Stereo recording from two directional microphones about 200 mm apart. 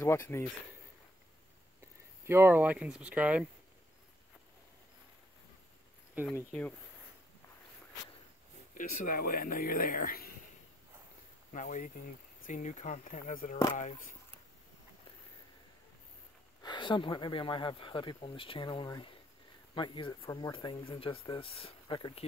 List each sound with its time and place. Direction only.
0.0 s speech: 15° left (ahead or behind)
2.2 s speech: 10° right (ahead or behind)
6.5 s speech: 5° left (ahead or behind)
8.7 s speech: 45° left (ahead or behind)
11.5 s speech: 40° left (ahead or behind)
16.6 s speech: 25° left (ahead or behind)